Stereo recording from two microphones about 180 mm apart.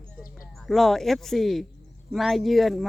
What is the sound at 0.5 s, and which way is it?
Speech, centre (ahead or behind).